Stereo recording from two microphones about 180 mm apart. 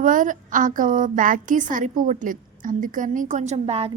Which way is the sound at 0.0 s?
45° right (ahead or behind).